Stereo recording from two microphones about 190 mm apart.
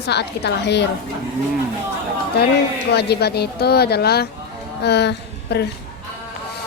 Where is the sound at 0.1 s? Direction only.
60° left (ahead or behind).